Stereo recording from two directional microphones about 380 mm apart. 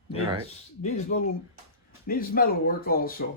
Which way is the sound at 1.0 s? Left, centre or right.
Centre.